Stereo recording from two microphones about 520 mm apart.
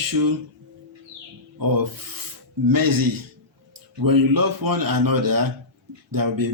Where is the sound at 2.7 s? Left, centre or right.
Right.